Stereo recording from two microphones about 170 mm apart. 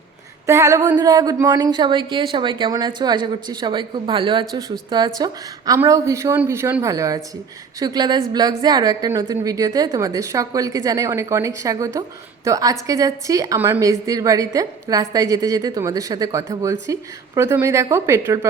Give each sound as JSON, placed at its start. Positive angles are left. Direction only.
{"t": 0.4, "sound": "a woman's voice", "side_deg": -15}